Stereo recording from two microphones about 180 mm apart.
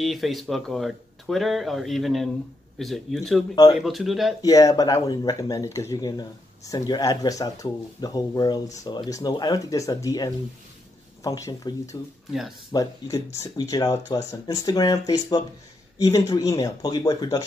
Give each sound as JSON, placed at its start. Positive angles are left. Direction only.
{"t": 0.0, "sound": "speech", "side_deg": 0}
{"t": 4.4, "sound": "speech", "side_deg": 20}
{"t": 12.3, "sound": "speech", "side_deg": 0}
{"t": 12.7, "sound": "speech", "side_deg": 20}